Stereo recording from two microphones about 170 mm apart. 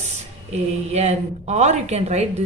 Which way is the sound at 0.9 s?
40° right (ahead or behind).